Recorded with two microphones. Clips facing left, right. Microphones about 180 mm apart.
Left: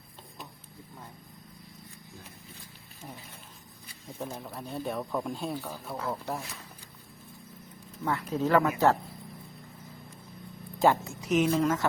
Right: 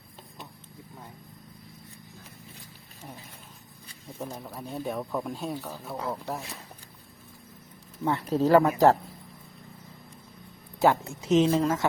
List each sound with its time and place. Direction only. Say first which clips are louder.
4.2 s speech: right 1 dB; 5° right (ahead or behind)
8.0 s speech: right 4 dB; 30° right (ahead or behind)
10.8 s speech: right 1 dB; 15° right (ahead or behind)